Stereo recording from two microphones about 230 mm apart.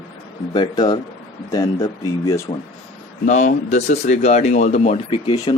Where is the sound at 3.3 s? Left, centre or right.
Left.